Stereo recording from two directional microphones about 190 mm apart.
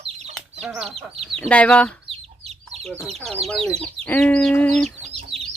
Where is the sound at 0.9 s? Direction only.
30° right (ahead or behind).